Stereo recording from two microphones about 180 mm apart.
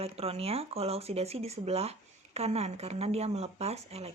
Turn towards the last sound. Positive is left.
turn(degrees=-35)  # may be behind; listen again after turning